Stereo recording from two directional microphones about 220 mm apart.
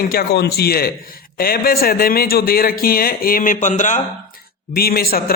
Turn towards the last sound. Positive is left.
turn(degrees=45)  # may be behind; listen again after turning